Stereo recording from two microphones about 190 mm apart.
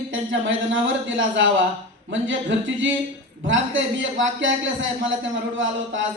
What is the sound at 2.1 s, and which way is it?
A man's voice, 80° right.